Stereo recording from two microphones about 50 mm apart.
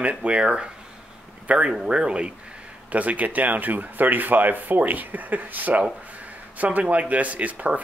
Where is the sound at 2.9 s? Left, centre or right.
Right.